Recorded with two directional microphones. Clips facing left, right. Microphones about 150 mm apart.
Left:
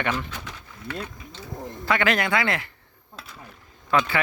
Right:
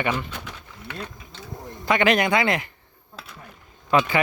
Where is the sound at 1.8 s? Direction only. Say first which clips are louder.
Right 3 dB; 20° right (ahead or behind).